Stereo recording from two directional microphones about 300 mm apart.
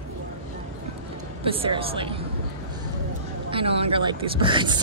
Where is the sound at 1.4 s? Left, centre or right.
Centre.